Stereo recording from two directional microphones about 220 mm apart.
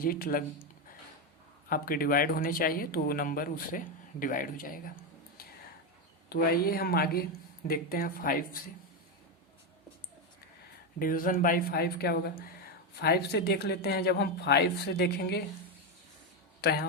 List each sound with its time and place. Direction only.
0.0 s speech: 40° left (ahead or behind)
1.7 s speech: 40° left (ahead or behind)
6.2 s speech: 45° left (ahead or behind)
11.0 s speech: 40° left (ahead or behind)
16.6 s speech: 45° left (ahead or behind)